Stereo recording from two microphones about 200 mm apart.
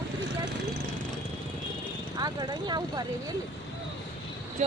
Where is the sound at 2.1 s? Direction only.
20° right (ahead or behind).